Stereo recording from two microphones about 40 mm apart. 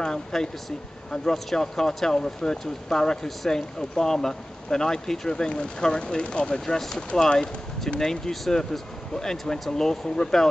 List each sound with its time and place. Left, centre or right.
0.0 s speech: centre